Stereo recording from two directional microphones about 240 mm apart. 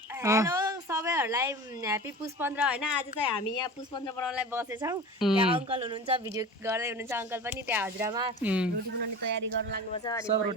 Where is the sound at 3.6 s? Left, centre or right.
Centre.